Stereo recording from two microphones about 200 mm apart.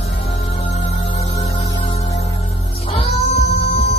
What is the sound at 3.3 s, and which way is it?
Music, 30° left (ahead or behind).